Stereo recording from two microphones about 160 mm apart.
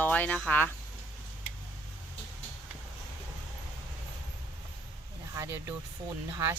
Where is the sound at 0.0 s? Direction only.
10° left (ahead or behind).